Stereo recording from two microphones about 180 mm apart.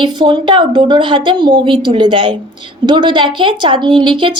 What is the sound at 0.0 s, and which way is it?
A woman's voice, 25° right (ahead or behind).